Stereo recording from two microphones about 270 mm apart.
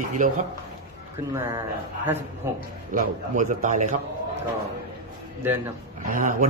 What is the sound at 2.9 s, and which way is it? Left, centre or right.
A man's voice, right.